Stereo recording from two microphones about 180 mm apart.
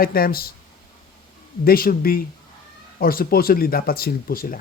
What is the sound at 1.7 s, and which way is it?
A man's voice, 55° left (ahead or behind).